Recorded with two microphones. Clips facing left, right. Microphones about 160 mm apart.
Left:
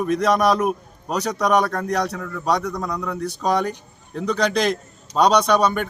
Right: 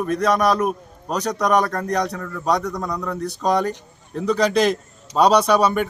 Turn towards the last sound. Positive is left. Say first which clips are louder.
# right 1 dB
turn(degrees=-5)  # may be behind; listen again after turning